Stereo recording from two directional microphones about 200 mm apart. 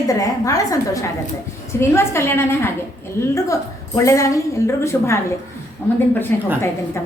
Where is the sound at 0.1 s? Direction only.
15° left (ahead or behind).